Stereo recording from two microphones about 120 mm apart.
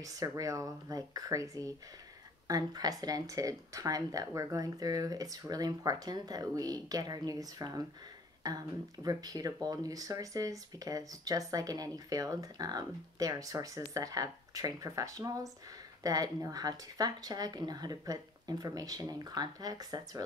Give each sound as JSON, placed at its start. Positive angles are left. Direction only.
{"t": 0.0, "sound": "speech", "side_deg": -30}